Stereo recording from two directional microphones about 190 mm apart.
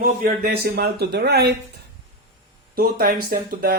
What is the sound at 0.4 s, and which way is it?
Speech, 55° right (ahead or behind).